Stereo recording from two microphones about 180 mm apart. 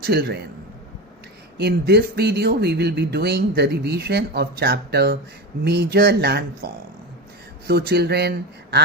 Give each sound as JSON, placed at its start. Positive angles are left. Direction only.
{"t": 0.0, "sound": "speech", "side_deg": -60}
{"t": 1.5, "sound": "speech", "side_deg": -65}
{"t": 7.7, "sound": "speech", "side_deg": -60}